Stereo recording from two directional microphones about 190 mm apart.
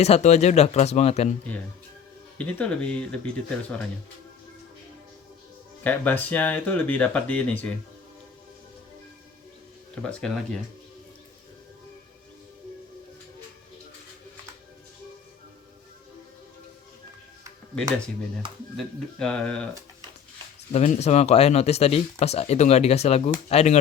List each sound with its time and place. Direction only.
0.0 s speech: 35° left (ahead or behind)
2.4 s speech: 5° left (ahead or behind)
5.8 s speech: 10° left (ahead or behind)
9.9 s speech: 5° left (ahead or behind)
18.8 s speech: 5° left (ahead or behind)
20.7 s speech: 35° left (ahead or behind)